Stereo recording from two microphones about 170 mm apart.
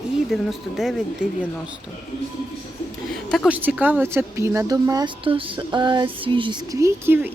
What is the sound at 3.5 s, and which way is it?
Speech, 10° right (ahead or behind).